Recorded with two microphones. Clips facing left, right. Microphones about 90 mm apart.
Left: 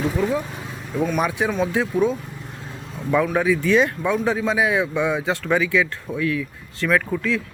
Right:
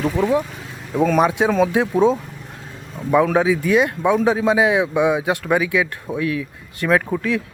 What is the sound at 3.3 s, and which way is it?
Speech, 20° right (ahead or behind).